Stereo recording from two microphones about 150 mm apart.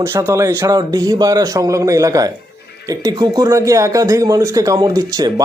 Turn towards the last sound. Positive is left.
turn(degrees=-25)  # may be behind; listen again after turning